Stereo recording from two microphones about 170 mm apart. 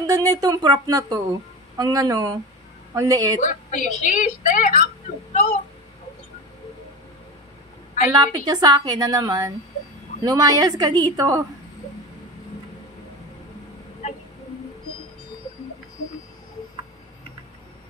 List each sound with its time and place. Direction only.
0.0 s a woman's voice: 20° right (ahead or behind)
3.3 s a woman's voice: 50° left (ahead or behind)
8.1 s a woman's voice: 20° right (ahead or behind)